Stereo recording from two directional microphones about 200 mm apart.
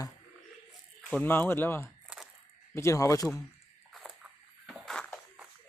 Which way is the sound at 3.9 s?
Centre (ahead or behind).